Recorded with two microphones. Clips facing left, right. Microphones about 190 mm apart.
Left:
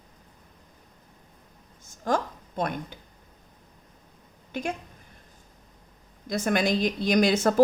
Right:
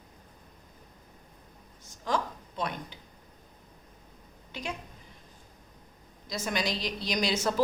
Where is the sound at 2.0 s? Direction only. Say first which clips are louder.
Left 4 dB; 50° left (ahead or behind).